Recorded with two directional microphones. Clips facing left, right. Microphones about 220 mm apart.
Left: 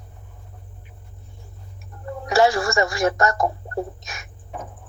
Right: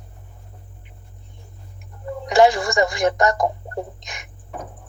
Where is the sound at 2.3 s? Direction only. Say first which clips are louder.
Right 3 dB; 15° right (ahead or behind).